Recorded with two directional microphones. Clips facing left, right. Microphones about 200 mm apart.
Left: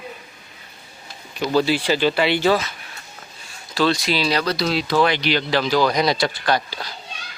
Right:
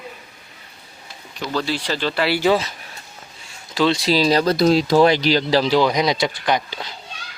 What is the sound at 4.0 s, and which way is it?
Speech, 40° right (ahead or behind).